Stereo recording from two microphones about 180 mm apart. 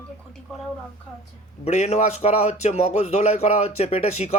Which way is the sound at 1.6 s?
40° left (ahead or behind).